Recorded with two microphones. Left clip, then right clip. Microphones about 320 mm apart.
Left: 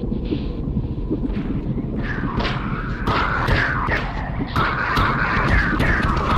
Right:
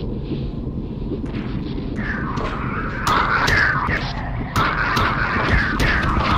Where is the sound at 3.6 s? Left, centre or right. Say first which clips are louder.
Right 2 dB; centre.